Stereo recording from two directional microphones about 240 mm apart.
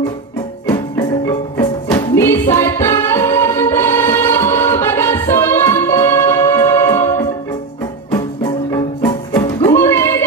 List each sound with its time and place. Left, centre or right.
0.7 s music: centre
8.7 s music: centre
9.8 s a sound: centre